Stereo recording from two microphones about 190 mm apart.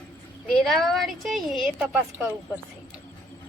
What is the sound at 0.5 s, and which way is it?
A woman's voice, centre (ahead or behind).